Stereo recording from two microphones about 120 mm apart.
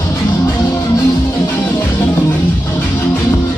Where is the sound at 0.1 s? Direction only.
20° left (ahead or behind).